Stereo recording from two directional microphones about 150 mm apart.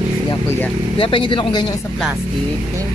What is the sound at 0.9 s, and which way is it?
Speech, 35° left (ahead or behind).